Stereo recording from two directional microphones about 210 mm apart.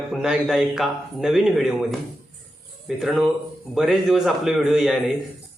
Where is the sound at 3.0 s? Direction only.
Centre (ahead or behind).